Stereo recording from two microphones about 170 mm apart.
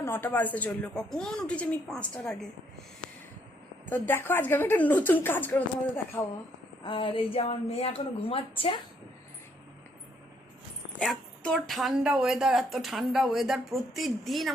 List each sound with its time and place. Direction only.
0.0 s speech: 15° left (ahead or behind)
3.8 s speech: 10° left (ahead or behind)
6.8 s speech: 30° left (ahead or behind)
11.0 s speech: centre (ahead or behind)